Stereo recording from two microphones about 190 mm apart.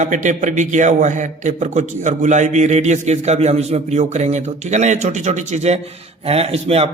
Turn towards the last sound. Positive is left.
turn(degrees=-30)  # may be behind; listen again after turning